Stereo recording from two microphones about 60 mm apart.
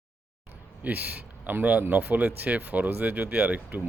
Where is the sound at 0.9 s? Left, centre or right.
Right.